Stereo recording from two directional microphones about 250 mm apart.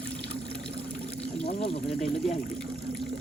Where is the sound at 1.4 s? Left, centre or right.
Left.